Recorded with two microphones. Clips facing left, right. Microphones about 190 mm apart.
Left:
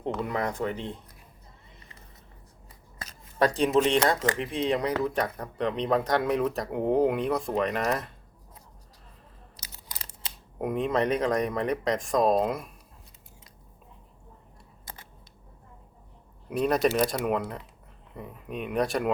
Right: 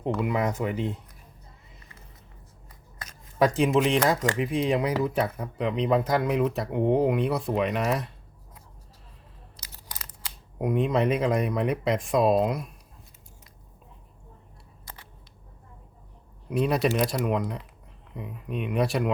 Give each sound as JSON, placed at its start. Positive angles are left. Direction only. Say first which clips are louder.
{"t": 0.2, "sound": "speech", "louder": "right 3 dB", "side_deg": -10}
{"t": 3.3, "sound": "speech", "louder": "right 1 dB", "side_deg": -5}
{"t": 9.6, "sound": "scissors", "louder": "right 1 dB", "side_deg": 25}
{"t": 10.6, "sound": "speech", "louder": "right 2 dB", "side_deg": 0}
{"t": 16.5, "sound": "speech", "louder": "even", "side_deg": 0}